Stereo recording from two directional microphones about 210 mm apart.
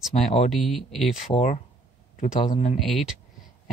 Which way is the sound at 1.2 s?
30° left (ahead or behind).